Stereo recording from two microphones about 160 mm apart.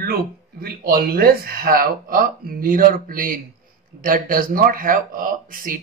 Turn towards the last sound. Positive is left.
turn(degrees=-60)  # may be behind; listen again after turning